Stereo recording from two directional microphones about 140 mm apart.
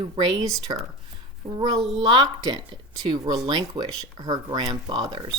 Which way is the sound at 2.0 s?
30° right (ahead or behind).